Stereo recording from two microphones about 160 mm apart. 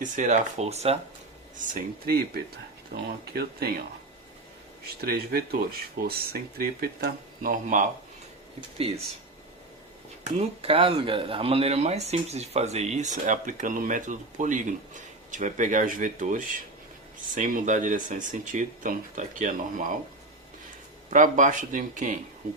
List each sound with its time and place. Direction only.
0.0 s speech: 50° right (ahead or behind)
1.5 s speech: 60° right (ahead or behind); by 3.7 s 75° right (ahead or behind)
4.9 s speech: 75° right (ahead or behind); by 7.9 s 55° right (ahead or behind)
10.3 s speech: 35° right (ahead or behind); by 19.9 s 60° right (ahead or behind)
21.1 s speech: 50° right (ahead or behind)